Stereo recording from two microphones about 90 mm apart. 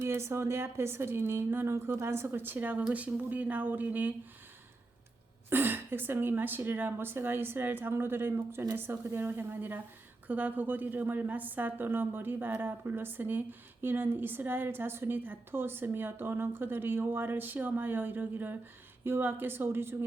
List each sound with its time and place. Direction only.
0.0 s a woman's voice: 30° right (ahead or behind)
5.5 s a woman's voice: 25° right (ahead or behind)